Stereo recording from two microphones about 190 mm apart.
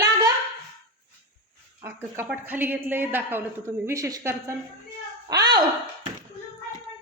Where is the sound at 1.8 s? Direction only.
10° right (ahead or behind).